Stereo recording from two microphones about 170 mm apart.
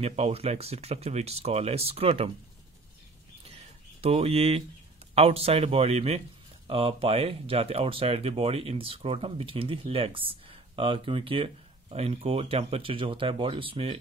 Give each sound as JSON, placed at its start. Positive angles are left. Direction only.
{"t": 0.0, "sound": "speech", "side_deg": -35}
{"t": 3.4, "sound": "a sound", "side_deg": -35}
{"t": 5.1, "sound": "speech", "side_deg": -35}